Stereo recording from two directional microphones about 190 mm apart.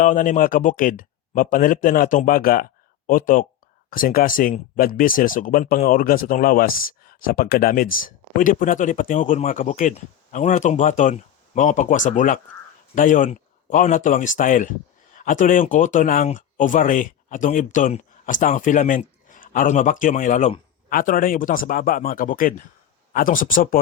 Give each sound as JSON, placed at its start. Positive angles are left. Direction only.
{"t": 0.0, "sound": "speech", "side_deg": 40}